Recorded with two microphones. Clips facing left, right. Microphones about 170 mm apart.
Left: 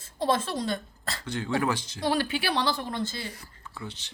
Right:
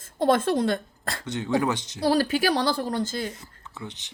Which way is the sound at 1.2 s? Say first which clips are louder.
Right 3 dB; 20° right (ahead or behind).